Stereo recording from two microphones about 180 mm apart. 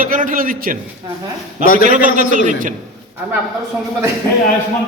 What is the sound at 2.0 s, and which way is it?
Speech, 45° right (ahead or behind).